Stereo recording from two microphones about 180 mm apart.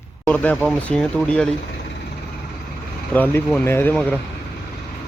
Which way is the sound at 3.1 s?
10° left (ahead or behind).